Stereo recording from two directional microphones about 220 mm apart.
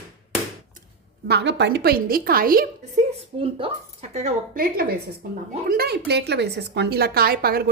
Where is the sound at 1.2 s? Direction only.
50° right (ahead or behind).